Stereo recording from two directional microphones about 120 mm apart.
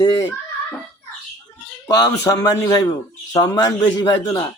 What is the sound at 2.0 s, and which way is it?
Speech, 30° left (ahead or behind).